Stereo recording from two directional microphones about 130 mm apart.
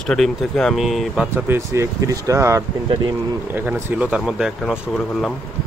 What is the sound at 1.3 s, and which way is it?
Speech, 20° right (ahead or behind).